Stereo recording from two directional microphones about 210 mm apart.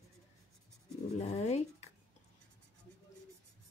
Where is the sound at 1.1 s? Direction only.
30° left (ahead or behind).